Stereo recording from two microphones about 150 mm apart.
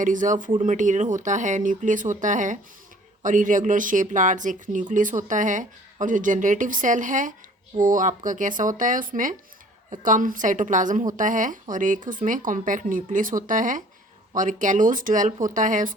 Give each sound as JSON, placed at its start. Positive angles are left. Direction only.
{"t": 0.0, "sound": "speech", "side_deg": -60}